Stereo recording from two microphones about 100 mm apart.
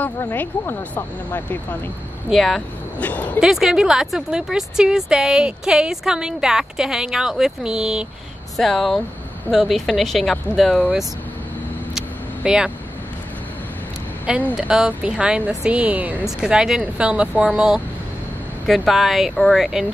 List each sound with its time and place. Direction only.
0.2 s speech: 25° left (ahead or behind)
2.2 s speech: centre (ahead or behind)
3.0 s speech: 15° left (ahead or behind)
3.3 s speech: 5° right (ahead or behind)
12.4 s speech: 10° right (ahead or behind)
14.3 s speech: 10° right (ahead or behind)